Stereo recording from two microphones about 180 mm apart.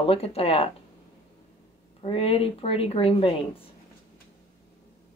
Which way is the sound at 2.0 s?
35° left (ahead or behind).